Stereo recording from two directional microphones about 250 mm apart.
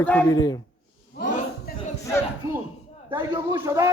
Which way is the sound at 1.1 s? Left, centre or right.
Left.